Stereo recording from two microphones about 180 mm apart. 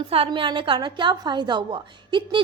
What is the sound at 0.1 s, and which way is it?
A woman's voice, 30° right (ahead or behind).